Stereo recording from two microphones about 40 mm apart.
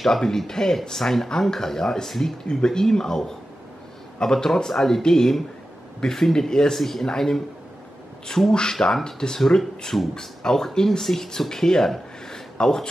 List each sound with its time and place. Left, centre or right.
0.0 s speech: centre
8.5 s speech: centre
8.7 s speech: centre
9.0 s speech: centre
9.4 s speech: centre